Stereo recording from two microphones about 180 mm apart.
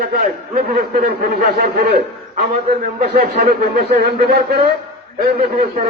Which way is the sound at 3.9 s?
60° right (ahead or behind).